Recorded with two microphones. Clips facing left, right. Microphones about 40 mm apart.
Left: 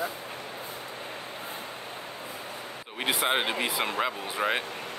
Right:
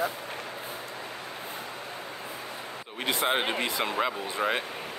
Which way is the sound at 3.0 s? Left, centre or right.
Centre.